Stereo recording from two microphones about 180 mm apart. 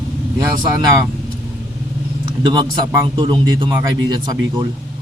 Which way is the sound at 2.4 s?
25° right (ahead or behind).